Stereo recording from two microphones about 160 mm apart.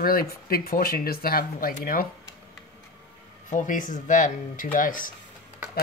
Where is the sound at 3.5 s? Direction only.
55° left (ahead or behind).